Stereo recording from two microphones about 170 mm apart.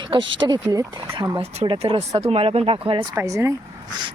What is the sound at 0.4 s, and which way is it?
Speech, 25° right (ahead or behind).